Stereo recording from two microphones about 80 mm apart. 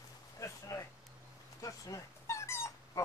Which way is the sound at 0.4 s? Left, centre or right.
Left.